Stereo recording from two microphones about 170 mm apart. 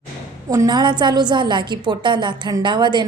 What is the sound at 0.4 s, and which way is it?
A woman's voice, 20° right (ahead or behind).